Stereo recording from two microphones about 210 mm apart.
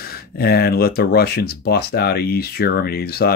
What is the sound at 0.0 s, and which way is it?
Speech, 45° left (ahead or behind).